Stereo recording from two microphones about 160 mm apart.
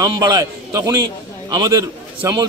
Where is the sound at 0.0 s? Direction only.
25° right (ahead or behind).